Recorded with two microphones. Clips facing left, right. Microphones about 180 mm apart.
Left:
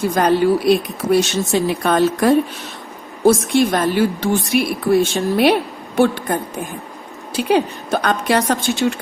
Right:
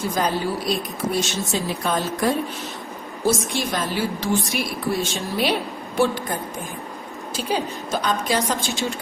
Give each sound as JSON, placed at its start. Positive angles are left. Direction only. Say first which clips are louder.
{"t": 0.0, "sound": "speech", "louder": "left 8 dB", "side_deg": 65}
{"t": 3.2, "sound": "speech", "louder": "left 9 dB", "side_deg": 60}